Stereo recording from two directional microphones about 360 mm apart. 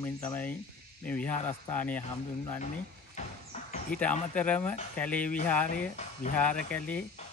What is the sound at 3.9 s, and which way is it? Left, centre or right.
Speech, centre.